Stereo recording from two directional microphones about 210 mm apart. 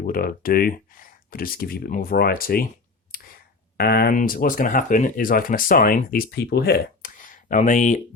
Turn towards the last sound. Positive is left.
turn(degrees=35)  # may be behind; listen again after turning